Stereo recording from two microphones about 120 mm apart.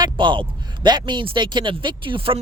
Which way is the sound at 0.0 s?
40° right (ahead or behind).